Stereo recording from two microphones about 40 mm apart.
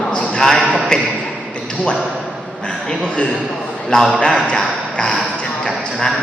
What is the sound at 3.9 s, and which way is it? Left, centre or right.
Speech, centre.